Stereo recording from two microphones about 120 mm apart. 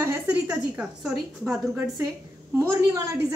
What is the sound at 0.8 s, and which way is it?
Speech, 5° right (ahead or behind).